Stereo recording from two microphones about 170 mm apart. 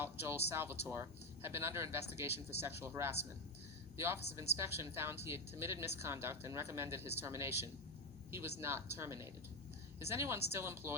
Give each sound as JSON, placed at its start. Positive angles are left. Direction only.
{"t": 0.0, "sound": "a woman's voice", "side_deg": -15}